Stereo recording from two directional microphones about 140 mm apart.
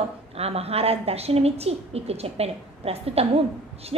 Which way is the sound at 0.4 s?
45° right (ahead or behind).